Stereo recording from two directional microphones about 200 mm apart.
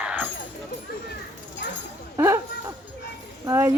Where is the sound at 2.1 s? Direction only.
15° right (ahead or behind).